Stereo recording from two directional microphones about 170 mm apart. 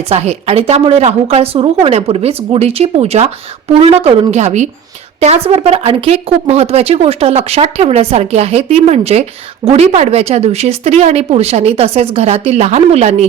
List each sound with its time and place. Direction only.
0.1 s a woman's voice: 40° right (ahead or behind)